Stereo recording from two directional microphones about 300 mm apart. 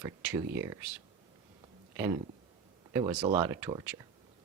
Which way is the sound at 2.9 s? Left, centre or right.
Centre.